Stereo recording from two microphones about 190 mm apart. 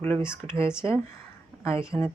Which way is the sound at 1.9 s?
5° left (ahead or behind).